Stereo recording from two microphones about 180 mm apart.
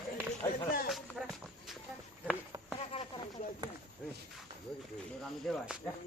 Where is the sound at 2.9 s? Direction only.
30° left (ahead or behind).